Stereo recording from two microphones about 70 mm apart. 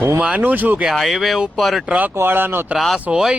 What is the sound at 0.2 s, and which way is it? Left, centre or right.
Speech, right.